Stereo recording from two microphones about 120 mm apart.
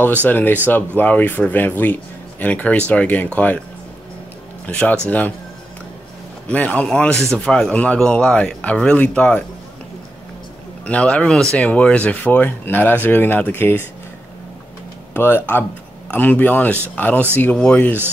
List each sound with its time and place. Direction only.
0.2 s speech: 15° left (ahead or behind)
4.6 s speech: 10° left (ahead or behind)
6.5 s speech: 10° left (ahead or behind)
10.9 s speech: 10° left (ahead or behind)
15.1 s speech: 15° left (ahead or behind)